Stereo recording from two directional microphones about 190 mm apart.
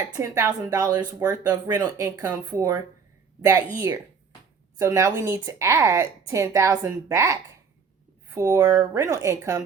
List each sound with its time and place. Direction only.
0.2 s speech: 15° right (ahead or behind)
4.8 s a woman's voice: 15° right (ahead or behind)